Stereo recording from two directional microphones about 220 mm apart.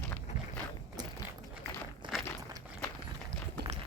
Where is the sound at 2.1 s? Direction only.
Centre (ahead or behind).